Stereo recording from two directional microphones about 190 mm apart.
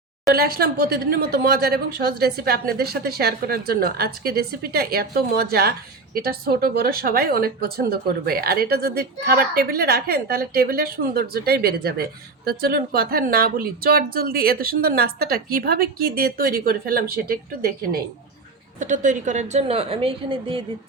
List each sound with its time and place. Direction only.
0.3 s speech: 55° right (ahead or behind)
18.8 s a woman's voice: 40° right (ahead or behind)